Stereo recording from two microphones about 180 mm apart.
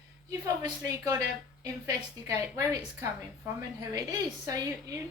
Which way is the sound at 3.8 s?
20° right (ahead or behind).